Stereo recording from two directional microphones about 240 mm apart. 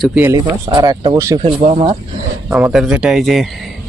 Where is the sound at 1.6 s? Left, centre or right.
Right.